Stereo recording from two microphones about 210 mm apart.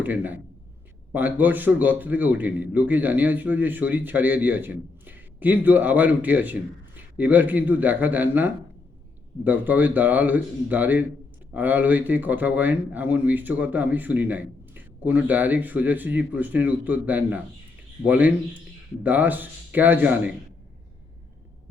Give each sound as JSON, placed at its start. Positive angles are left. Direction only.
{"t": 0.0, "sound": "a man's voice", "side_deg": -10}